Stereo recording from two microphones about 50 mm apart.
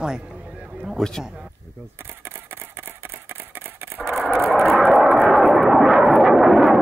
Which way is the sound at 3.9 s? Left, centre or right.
Right.